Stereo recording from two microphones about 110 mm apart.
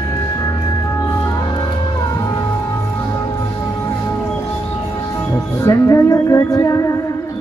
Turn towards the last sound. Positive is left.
turn(degrees=30)  # may be behind; listen again after turning